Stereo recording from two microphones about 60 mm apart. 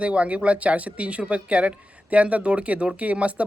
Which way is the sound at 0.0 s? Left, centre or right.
Right.